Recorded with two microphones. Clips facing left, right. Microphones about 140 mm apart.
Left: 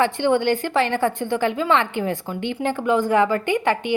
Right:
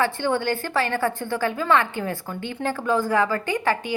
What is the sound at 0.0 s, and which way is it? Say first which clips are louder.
A woman's voice: left 4 dB; 20° left (ahead or behind).